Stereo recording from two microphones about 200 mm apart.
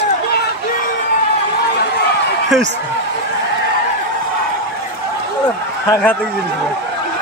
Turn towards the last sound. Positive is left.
turn(degrees=15)  # may be behind; listen again after turning